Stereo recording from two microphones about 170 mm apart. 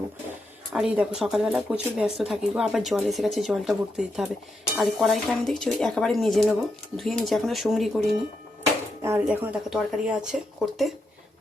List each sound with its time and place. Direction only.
0.7 s speech: 5° right (ahead or behind)
9.0 s speech: 10° right (ahead or behind)